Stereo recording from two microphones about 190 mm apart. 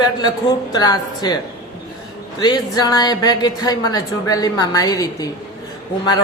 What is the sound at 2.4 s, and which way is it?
A woman's voice, 20° left (ahead or behind).